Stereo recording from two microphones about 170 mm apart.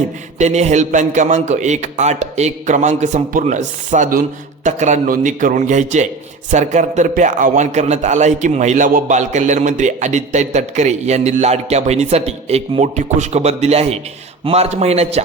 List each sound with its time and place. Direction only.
0.3 s a man's voice: 45° right (ahead or behind)